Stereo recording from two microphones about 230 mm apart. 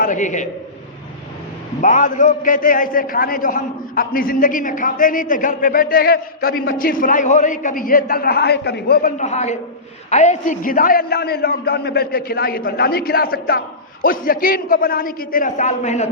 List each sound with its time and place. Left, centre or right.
0.0 s a man's voice: left
1.8 s a man's voice: left